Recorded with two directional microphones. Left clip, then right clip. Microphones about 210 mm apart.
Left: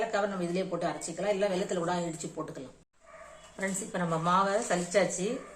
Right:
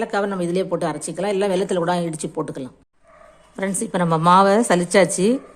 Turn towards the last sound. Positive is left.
turn(degrees=-50)  # may be behind; listen again after turning